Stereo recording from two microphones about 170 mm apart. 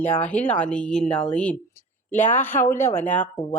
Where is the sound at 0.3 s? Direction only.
5° left (ahead or behind).